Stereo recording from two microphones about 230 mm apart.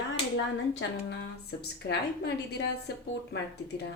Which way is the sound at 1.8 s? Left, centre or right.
Left.